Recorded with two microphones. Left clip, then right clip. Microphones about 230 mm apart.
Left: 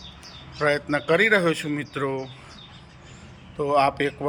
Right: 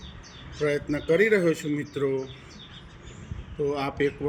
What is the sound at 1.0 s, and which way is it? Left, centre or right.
Speech, left.